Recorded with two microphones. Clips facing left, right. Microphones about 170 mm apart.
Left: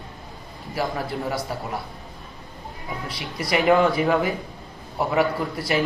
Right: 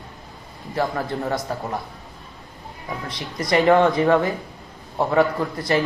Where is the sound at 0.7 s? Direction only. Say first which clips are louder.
Right 3 dB; 10° left (ahead or behind).